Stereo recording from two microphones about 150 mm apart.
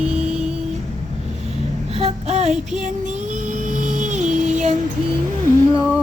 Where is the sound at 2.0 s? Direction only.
45° right (ahead or behind).